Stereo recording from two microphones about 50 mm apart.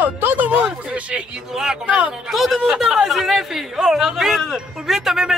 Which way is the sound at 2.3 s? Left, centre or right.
Centre.